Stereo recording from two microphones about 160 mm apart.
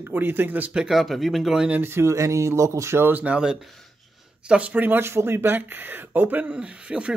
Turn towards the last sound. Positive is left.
turn(degrees=-5)  # may be behind; listen again after turning